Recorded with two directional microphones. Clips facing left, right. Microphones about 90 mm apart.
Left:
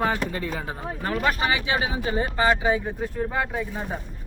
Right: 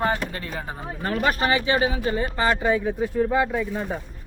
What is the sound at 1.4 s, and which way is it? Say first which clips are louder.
Speech: right 3 dB; 10° left (ahead or behind).